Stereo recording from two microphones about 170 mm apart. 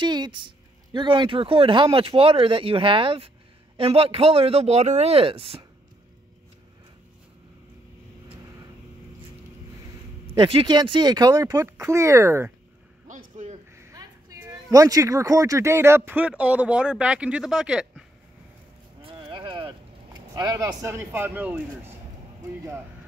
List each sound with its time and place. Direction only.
0.0 s speech: 25° right (ahead or behind)
10.2 s speech: 30° right (ahead or behind); by 12.5 s 15° right (ahead or behind)
13.1 s a sound: 45° right (ahead or behind)
13.7 s speech: 20° right (ahead or behind)
19.0 s clip-clop: 30° right (ahead or behind)
20.3 s speech: 25° right (ahead or behind)